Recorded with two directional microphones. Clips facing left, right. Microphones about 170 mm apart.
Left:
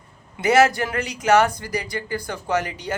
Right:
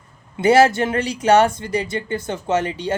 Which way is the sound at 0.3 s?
30° right (ahead or behind).